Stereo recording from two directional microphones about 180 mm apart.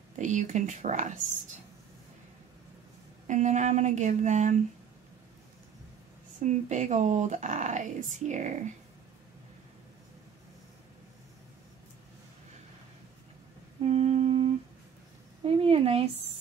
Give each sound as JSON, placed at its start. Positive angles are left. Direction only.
{"t": 0.1, "sound": "speech", "side_deg": -45}
{"t": 3.3, "sound": "speech", "side_deg": -40}
{"t": 6.4, "sound": "speech", "side_deg": -40}
{"t": 13.8, "sound": "humming", "side_deg": -35}
{"t": 15.4, "sound": "a sound", "side_deg": -30}